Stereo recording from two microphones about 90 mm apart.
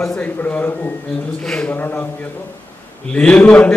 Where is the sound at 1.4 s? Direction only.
10° left (ahead or behind).